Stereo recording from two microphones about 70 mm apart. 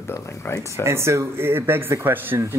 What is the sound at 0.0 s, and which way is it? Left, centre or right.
Speech, left.